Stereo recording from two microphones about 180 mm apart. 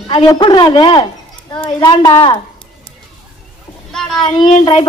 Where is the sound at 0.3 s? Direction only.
25° left (ahead or behind).